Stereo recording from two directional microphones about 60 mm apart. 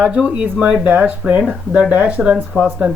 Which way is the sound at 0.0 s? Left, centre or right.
Centre.